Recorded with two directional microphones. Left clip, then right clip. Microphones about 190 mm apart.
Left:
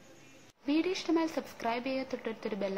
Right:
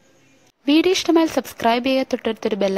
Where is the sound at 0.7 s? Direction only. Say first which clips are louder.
Right 14 dB; 50° right (ahead or behind).